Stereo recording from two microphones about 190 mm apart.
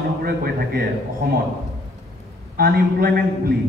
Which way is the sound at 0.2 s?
55° right (ahead or behind).